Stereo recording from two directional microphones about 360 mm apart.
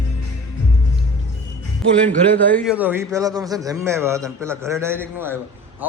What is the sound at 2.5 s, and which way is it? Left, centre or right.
A man's voice, centre.